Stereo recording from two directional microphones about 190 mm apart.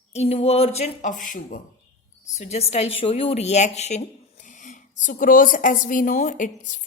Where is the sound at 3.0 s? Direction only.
30° left (ahead or behind).